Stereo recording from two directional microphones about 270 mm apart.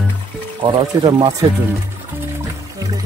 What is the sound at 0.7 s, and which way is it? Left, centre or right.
Speech, centre.